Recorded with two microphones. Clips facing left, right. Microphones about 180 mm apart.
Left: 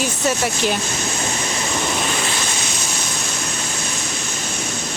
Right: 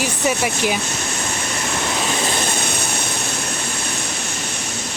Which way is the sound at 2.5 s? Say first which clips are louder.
Right 3 dB; 55° right (ahead or behind).